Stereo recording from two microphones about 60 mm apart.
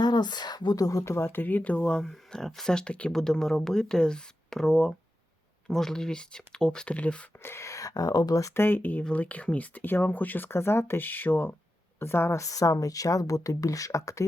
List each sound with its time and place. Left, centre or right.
0.4 s speech: left
1.0 s speech: left; by 3.1 s centre
3.1 s speech: centre
7.4 s speech: left
8.5 s speech: left
11.9 s speech: left
12.4 s speech: left